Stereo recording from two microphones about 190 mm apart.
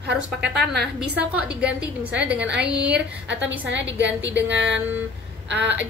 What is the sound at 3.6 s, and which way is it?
A woman's voice, 70° right (ahead or behind).